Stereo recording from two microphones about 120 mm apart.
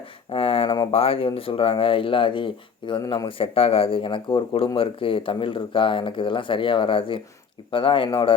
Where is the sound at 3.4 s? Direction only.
55° left (ahead or behind).